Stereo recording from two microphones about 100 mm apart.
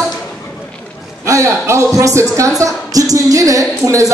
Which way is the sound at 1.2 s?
30° right (ahead or behind).